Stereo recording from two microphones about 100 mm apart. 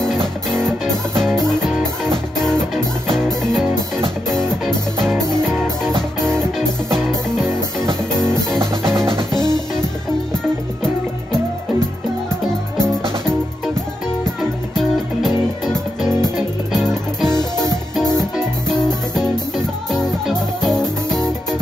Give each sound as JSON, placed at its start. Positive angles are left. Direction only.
{"t": 1.2, "sound": "music", "side_deg": 5}
{"t": 8.8, "sound": "music", "side_deg": 5}
{"t": 9.3, "sound": "music", "side_deg": 45}
{"t": 14.8, "sound": "music", "side_deg": 5}
{"t": 16.7, "sound": "music", "side_deg": 5}
{"t": 18.7, "sound": "music", "side_deg": 5}